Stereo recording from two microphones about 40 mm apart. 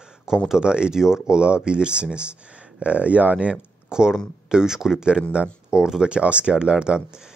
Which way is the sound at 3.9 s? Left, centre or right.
Centre.